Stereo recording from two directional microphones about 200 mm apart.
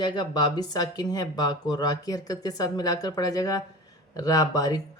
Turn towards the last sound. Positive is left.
turn(degrees=20)  # may be behind; listen again after turning